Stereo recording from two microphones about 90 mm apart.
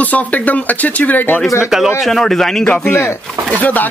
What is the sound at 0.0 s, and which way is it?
Speech, 15° left (ahead or behind).